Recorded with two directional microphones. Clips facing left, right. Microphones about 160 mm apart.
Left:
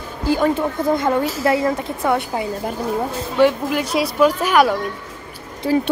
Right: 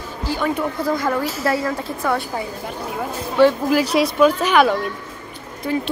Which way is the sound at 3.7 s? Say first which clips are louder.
Right 3 dB; centre (ahead or behind).